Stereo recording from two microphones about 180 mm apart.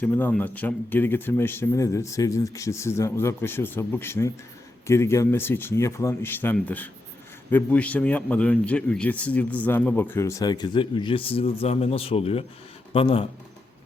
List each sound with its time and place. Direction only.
0.0 s a man's voice: 10° left (ahead or behind); by 13.2 s 30° left (ahead or behind)